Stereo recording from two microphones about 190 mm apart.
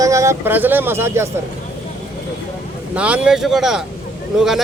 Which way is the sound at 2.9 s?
5° right (ahead or behind).